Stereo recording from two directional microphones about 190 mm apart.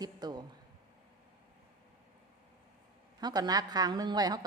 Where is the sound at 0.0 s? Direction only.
20° right (ahead or behind).